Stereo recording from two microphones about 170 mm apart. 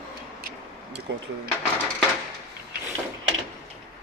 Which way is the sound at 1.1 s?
90° right.